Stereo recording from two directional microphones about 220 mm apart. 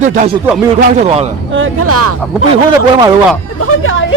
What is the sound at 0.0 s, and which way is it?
A man's voice, 35° right (ahead or behind).